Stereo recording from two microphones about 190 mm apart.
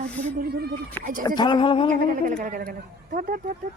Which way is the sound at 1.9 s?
45° right (ahead or behind).